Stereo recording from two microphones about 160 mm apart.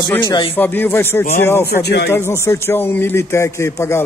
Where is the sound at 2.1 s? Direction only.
15° left (ahead or behind).